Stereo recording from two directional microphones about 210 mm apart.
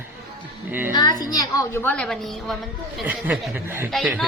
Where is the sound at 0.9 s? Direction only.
20° left (ahead or behind).